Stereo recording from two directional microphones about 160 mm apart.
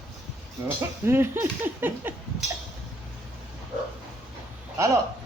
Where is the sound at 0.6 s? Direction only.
15° right (ahead or behind).